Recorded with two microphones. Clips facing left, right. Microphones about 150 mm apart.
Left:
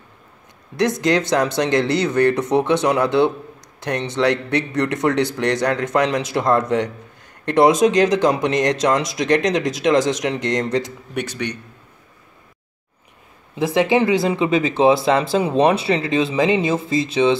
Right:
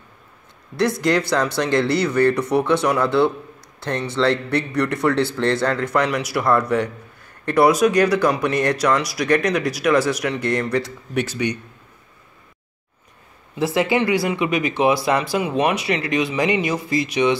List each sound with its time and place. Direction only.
0.7 s a man's voice: 20° left (ahead or behind)
11.1 s a man's voice: 5° right (ahead or behind)
13.6 s a man's voice: 20° left (ahead or behind)